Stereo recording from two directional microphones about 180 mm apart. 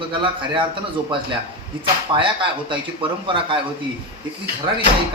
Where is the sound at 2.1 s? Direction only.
25° right (ahead or behind).